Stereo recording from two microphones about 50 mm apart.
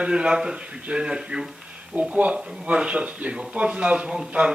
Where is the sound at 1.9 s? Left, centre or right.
Right.